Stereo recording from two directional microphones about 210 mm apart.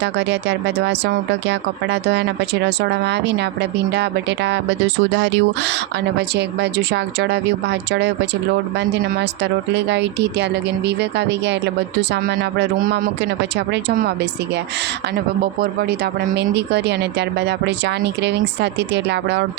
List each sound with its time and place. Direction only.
0.0 s speech: 55° right (ahead or behind)
15.6 s speech: 50° right (ahead or behind)